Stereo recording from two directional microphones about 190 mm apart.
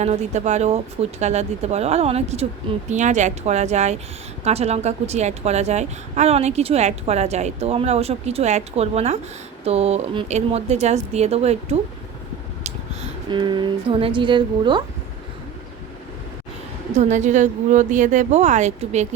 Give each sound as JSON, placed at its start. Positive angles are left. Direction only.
{"t": 0.0, "sound": "a woman's voice", "side_deg": -35}
{"t": 16.9, "sound": "a woman's voice", "side_deg": -35}